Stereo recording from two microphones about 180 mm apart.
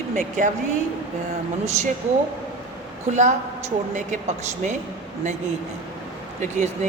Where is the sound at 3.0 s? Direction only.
40° right (ahead or behind).